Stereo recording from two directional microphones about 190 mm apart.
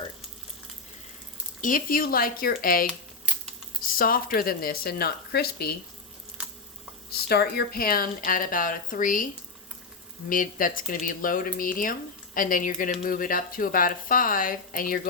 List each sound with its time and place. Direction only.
1.6 s speech: 45° left (ahead or behind)
7.1 s speech: 55° left (ahead or behind)